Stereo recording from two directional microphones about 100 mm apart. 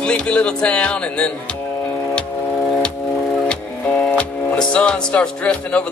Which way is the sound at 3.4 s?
10° left (ahead or behind).